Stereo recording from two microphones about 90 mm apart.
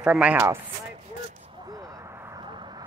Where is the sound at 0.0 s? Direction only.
10° right (ahead or behind).